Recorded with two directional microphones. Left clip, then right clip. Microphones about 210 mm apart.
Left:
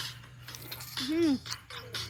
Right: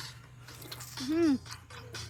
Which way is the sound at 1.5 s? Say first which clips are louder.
Left 6 dB; 40° left (ahead or behind).